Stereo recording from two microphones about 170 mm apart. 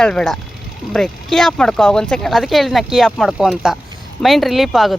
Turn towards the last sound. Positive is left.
turn(degrees=0)  # may be behind; listen again after turning